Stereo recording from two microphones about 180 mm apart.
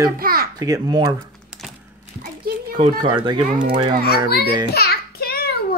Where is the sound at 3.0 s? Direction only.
25° right (ahead or behind).